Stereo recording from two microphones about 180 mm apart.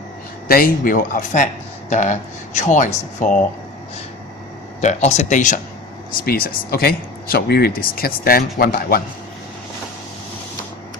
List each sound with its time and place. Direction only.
0.4 s speech: 55° left (ahead or behind)
4.8 s speech: 40° left (ahead or behind)
6.2 s speech: 55° left (ahead or behind)